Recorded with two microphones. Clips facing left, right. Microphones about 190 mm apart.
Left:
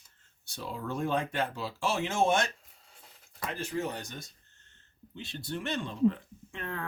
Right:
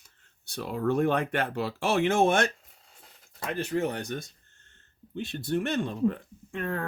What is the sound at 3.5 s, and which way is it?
Speech, 60° right (ahead or behind).